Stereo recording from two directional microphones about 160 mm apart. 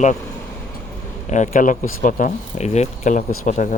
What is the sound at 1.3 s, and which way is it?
Speech, 50° left (ahead or behind).